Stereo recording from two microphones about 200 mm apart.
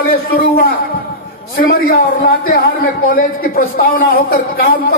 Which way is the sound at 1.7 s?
50° left (ahead or behind).